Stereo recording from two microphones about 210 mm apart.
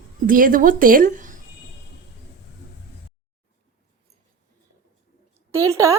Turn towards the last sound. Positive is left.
turn(degrees=-15)  # may be behind; listen again after turning